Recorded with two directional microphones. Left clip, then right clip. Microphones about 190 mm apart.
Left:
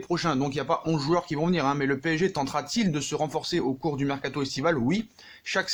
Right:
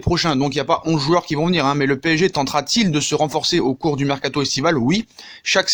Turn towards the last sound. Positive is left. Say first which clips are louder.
# right 10 dB
turn(degrees=-45)  # may be behind; listen again after turning